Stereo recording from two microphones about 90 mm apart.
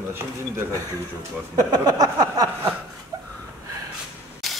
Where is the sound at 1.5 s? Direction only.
45° right (ahead or behind).